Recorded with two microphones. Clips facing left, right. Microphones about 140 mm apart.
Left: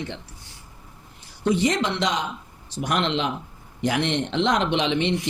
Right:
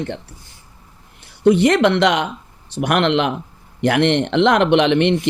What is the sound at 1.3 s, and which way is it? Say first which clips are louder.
Speech: right 8 dB; 65° right (ahead or behind).